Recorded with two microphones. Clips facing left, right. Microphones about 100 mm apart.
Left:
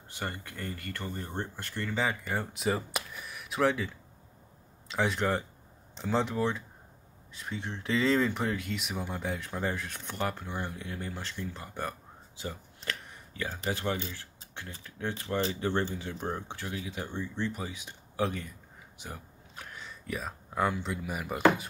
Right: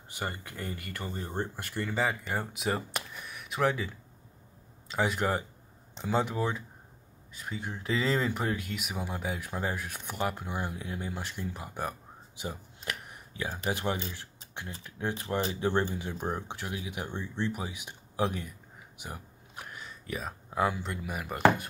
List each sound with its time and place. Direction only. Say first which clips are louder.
0.1 s speech: right 1 dB; 10° right (ahead or behind)
2.0 s speech: even; centre (ahead or behind)
18.9 s a sound: right 1 dB; 15° right (ahead or behind)
19.8 s speech: left 1 dB; centre (ahead or behind)